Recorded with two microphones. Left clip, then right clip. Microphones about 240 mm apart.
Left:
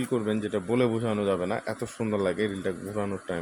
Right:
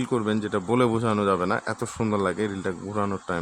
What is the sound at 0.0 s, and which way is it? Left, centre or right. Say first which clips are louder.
Speech: right 2 dB; centre.